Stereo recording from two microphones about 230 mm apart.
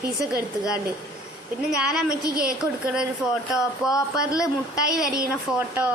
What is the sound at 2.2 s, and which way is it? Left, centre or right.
Speech, right.